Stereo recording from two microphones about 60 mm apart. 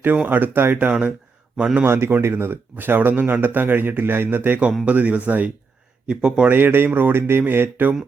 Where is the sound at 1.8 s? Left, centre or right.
Right.